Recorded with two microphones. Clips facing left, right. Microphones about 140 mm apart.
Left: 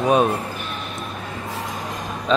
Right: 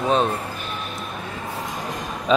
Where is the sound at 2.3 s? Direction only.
10° right (ahead or behind).